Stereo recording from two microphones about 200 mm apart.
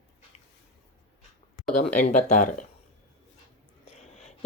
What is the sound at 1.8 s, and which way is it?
Speech, 35° left (ahead or behind).